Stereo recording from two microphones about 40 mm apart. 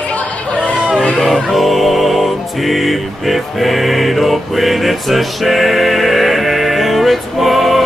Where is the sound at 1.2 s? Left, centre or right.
Centre.